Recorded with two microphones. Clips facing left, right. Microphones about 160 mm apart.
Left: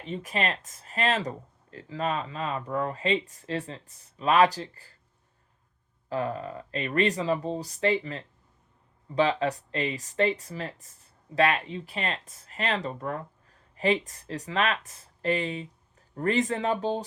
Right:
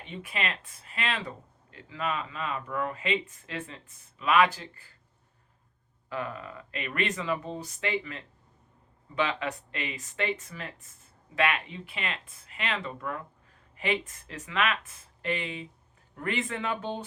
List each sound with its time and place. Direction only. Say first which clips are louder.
0.0 s speech: left 5 dB; 40° left (ahead or behind)
6.1 s speech: left 6 dB; 35° left (ahead or behind)